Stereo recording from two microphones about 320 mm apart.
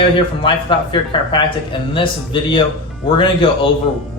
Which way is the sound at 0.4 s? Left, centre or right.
Centre.